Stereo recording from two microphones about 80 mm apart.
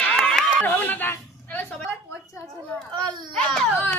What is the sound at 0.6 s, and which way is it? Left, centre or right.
Speech, left.